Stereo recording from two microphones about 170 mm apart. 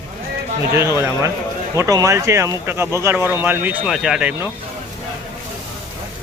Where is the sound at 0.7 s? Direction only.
15° right (ahead or behind).